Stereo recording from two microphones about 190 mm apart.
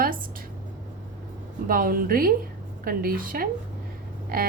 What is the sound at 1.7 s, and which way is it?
A woman's voice, 50° right (ahead or behind).